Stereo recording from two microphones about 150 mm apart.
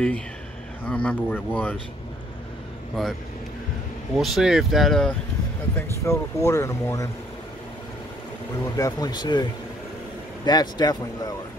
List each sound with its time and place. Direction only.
0.8 s speech: 10° left (ahead or behind)
4.1 s speech: centre (ahead or behind)
5.8 s speech: 20° left (ahead or behind)
8.7 s speech: 25° left (ahead or behind)